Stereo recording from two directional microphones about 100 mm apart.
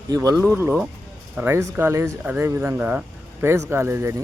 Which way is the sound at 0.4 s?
20° right (ahead or behind).